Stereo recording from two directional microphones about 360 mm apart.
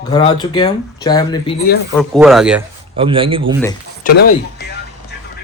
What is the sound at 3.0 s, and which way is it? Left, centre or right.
Speech, centre.